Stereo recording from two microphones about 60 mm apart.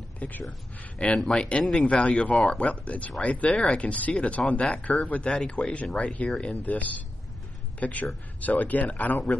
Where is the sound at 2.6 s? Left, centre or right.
Left.